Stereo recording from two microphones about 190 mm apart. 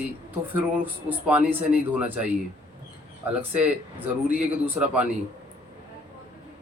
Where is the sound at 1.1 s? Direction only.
10° right (ahead or behind).